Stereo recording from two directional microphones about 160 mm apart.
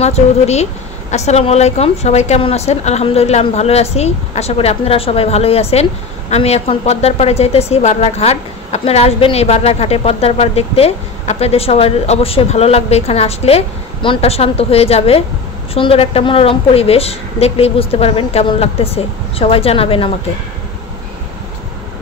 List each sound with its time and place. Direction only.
0.0 s a woman's voice: 45° left (ahead or behind)